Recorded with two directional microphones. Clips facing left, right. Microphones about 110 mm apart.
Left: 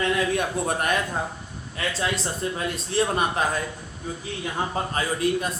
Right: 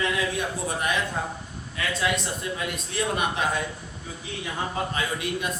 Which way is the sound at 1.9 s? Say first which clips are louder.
Right 1 dB; 35° left (ahead or behind).